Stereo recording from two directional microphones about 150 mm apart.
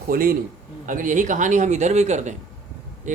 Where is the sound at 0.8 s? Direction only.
60° right (ahead or behind).